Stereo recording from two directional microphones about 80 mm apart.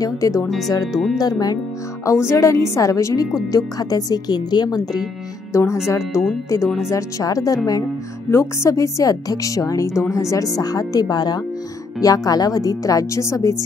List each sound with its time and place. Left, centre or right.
0.0 s speech: left
1.1 s speech: left
2.0 s speech: left
5.5 s speech: left
8.3 s speech: left